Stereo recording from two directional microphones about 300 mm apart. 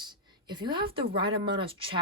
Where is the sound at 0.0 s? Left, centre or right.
Centre.